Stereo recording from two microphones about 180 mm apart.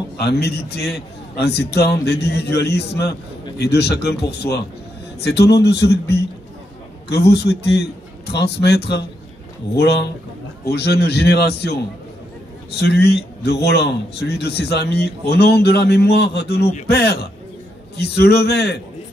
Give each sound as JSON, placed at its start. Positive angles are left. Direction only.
{"t": 0.2, "sound": "a man's voice", "side_deg": 65}